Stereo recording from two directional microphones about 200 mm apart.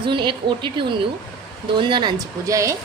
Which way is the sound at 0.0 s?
25° right (ahead or behind).